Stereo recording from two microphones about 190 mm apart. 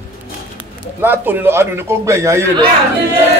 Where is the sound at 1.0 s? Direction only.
10° right (ahead or behind).